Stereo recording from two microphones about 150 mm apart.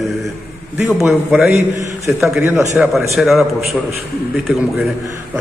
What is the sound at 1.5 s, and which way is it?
A man's voice, 20° right (ahead or behind).